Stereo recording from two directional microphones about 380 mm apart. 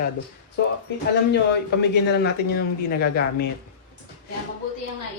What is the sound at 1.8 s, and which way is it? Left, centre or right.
Speech, left.